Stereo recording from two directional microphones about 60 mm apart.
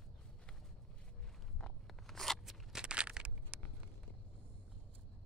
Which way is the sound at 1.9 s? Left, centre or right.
Centre.